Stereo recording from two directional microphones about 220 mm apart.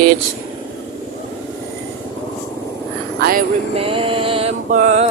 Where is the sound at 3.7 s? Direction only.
25° right (ahead or behind).